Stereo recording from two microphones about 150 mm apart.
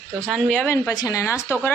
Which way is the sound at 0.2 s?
5° left (ahead or behind).